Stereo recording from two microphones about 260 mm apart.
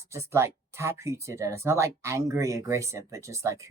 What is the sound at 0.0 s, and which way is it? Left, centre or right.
Speech, centre.